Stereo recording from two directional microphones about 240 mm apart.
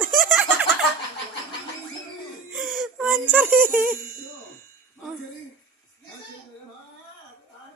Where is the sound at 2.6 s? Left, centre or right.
Centre.